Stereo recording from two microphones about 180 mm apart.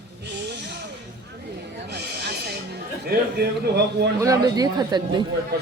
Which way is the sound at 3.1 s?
65° right (ahead or behind).